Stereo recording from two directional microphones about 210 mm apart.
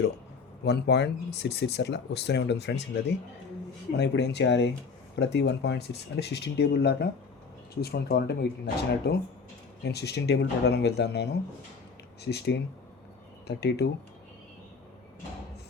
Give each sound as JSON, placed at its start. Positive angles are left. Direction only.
{"t": 0.6, "sound": "speech", "side_deg": 50}